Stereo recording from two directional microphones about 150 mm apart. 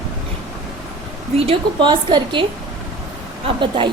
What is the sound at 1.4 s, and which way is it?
A woman's voice, 35° right (ahead or behind).